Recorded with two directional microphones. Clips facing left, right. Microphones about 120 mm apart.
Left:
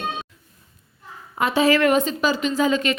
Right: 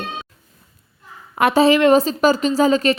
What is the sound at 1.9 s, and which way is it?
Speech, 40° right (ahead or behind).